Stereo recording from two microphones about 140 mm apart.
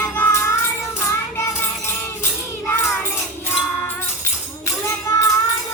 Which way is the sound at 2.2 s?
15° left (ahead or behind).